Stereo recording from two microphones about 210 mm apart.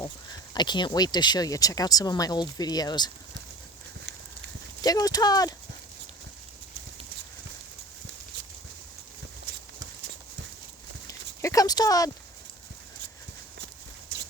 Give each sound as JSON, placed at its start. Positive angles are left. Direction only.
{"t": 0.5, "sound": "speech", "side_deg": 20}
{"t": 4.8, "sound": "speech", "side_deg": 20}
{"t": 11.0, "sound": "a sound", "side_deg": 15}